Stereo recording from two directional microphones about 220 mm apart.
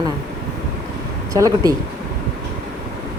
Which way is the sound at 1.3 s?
15° right (ahead or behind).